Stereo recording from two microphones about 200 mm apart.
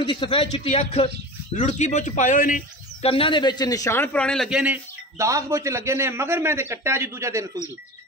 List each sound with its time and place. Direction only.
0.0 s speech: 25° left (ahead or behind); by 3.1 s 40° left (ahead or behind)
3.1 s a man's voice: 25° left (ahead or behind); by 4.7 s 5° right (ahead or behind)
5.2 s a man's voice: 15° right (ahead or behind)